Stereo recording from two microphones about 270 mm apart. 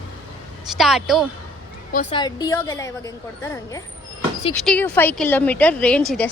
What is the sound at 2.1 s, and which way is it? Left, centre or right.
A woman's voice, centre.